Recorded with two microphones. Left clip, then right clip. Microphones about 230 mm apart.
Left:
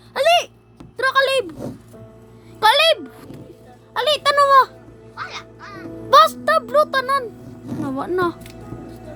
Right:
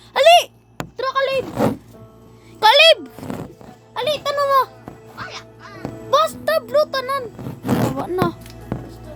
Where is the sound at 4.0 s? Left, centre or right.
Centre.